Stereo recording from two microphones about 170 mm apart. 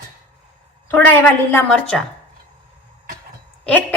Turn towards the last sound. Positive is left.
turn(degrees=10)  # may be behind; listen again after turning